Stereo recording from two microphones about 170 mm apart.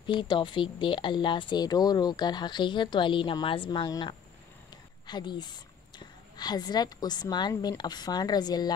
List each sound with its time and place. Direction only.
0.0 s a woman's voice: 25° left (ahead or behind)